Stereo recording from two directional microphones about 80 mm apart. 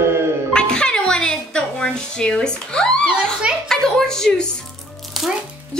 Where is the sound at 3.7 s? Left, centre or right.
Centre.